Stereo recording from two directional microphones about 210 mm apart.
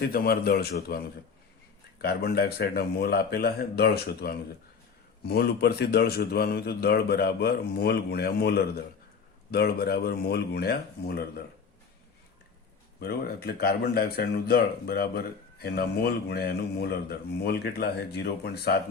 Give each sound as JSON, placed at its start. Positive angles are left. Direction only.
{"t": 0.0, "sound": "a man's voice", "side_deg": 45}
{"t": 13.0, "sound": "a man's voice", "side_deg": 50}